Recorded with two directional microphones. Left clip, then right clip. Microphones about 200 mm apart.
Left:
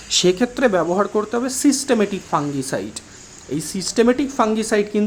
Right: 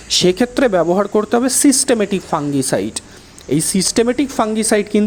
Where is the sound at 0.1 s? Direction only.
30° right (ahead or behind).